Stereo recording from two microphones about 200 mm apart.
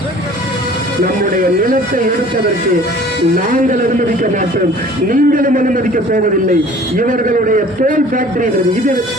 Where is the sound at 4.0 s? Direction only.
40° right (ahead or behind).